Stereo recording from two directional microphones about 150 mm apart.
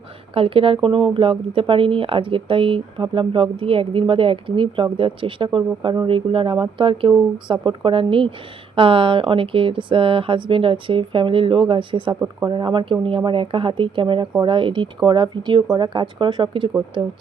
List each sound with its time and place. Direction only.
0.3 s speech: 35° right (ahead or behind)